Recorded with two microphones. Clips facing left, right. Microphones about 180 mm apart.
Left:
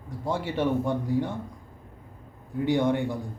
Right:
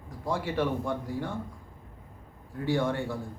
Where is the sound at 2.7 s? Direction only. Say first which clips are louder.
Left 4 dB; 20° left (ahead or behind).